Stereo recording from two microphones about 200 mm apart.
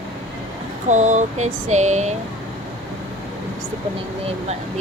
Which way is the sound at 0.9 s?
35° right (ahead or behind).